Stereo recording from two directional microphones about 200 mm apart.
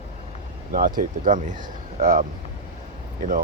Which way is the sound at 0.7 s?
45° right (ahead or behind).